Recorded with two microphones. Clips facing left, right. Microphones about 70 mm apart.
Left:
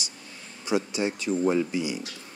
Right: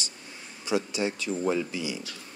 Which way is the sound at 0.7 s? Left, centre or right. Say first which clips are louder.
Left 1 dB; left.